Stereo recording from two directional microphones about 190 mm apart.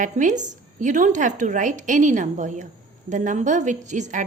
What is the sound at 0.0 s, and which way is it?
A woman's voice, 40° right (ahead or behind).